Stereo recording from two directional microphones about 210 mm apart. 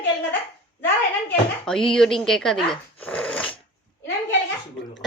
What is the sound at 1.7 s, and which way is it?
Speech, 5° left (ahead or behind).